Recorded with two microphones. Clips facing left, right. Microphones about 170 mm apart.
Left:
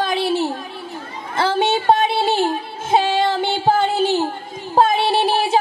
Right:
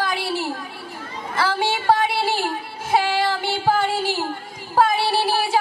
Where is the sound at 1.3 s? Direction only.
25° left (ahead or behind).